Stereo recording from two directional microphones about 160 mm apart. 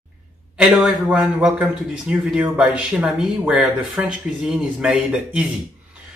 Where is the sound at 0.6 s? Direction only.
5° right (ahead or behind).